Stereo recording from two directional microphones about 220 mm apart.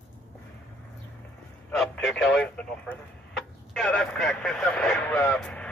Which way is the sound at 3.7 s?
5° left (ahead or behind).